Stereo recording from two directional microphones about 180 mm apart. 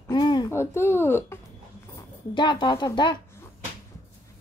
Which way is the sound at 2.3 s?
25° left (ahead or behind).